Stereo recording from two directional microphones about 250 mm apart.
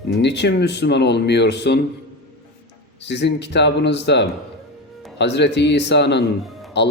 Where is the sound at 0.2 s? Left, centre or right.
Left.